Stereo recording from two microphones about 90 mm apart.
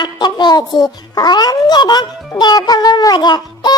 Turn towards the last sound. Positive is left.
turn(degrees=50)  # may be behind; listen again after turning